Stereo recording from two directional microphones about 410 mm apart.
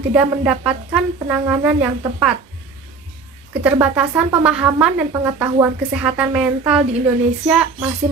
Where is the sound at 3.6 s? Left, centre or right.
Centre.